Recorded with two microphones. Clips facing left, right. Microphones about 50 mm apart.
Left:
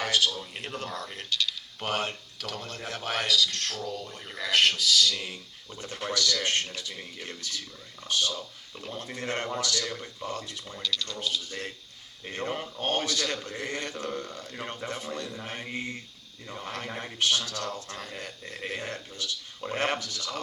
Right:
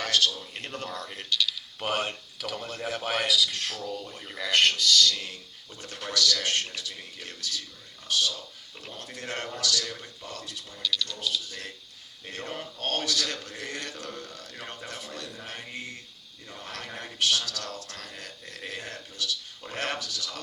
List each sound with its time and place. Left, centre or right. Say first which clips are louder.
0.0 s a man's voice: even; centre
5.8 s a man's voice: right 1 dB; left
9.8 s speech: left 3 dB; centre
10.2 s speech: left 4 dB; left
12.2 s a man's voice: left 4 dB; left
14.5 s speech: left 4 dB; centre
14.8 s a man's voice: left 4 dB; left
15.3 s a man's voice: left 3 dB; centre; by 20.4 s left